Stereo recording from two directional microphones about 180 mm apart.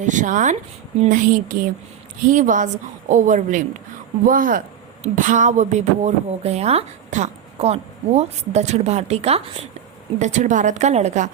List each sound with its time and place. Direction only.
0.0 s a woman's voice: 45° right (ahead or behind)